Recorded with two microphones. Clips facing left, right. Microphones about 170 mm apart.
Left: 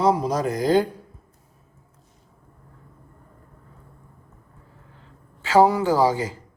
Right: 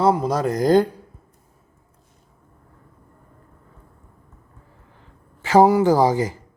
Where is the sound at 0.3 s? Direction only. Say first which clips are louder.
Right 3 dB; 40° right (ahead or behind).